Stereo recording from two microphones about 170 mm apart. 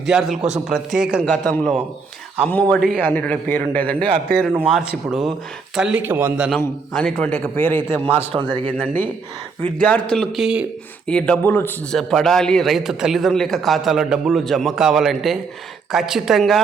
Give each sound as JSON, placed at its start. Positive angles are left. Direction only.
{"t": 0.0, "sound": "a man's voice", "side_deg": 0}
{"t": 4.4, "sound": "a man's voice", "side_deg": -5}
{"t": 6.9, "sound": "a man's voice", "side_deg": 5}
{"t": 8.3, "sound": "a man's voice", "side_deg": -35}
{"t": 9.7, "sound": "a man's voice", "side_deg": 5}
{"t": 11.0, "sound": "a man's voice", "side_deg": 5}